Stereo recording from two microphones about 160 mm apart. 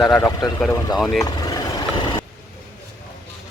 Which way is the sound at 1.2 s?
20° left (ahead or behind).